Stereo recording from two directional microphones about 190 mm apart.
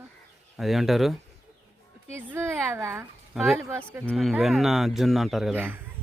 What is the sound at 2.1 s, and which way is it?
Speech, 15° right (ahead or behind).